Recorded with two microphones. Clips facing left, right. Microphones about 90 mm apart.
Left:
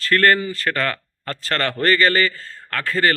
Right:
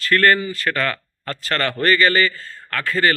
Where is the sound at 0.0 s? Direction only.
35° left (ahead or behind).